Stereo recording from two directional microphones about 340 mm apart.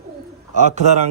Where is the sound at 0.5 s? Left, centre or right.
Centre.